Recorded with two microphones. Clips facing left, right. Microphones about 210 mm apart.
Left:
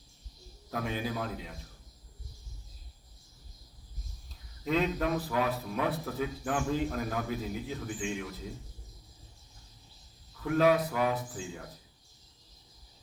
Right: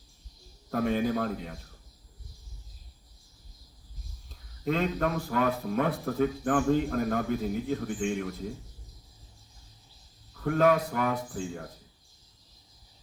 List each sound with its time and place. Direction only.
0.7 s a man's voice: 45° right (ahead or behind)
4.6 s a man's voice: 45° right (ahead or behind)
10.4 s a man's voice: 50° right (ahead or behind)